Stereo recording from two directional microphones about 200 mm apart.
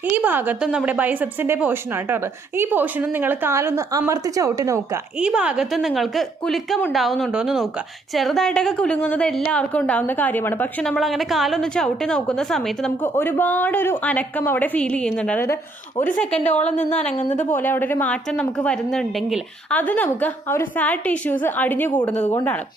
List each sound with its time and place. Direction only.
0.2 s a woman's voice: 10° right (ahead or behind)
5.2 s a woman's voice: 5° right (ahead or behind)
17.2 s a woman's voice: 35° left (ahead or behind)
17.5 s a woman's voice: 10° left (ahead or behind)